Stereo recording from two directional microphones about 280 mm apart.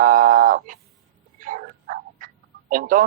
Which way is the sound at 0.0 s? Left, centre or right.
Right.